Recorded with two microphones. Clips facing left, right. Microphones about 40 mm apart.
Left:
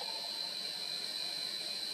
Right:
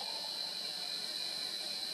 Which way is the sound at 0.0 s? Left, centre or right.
Left.